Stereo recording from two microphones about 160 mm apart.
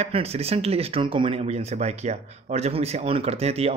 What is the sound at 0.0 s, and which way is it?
Speech, 40° right (ahead or behind).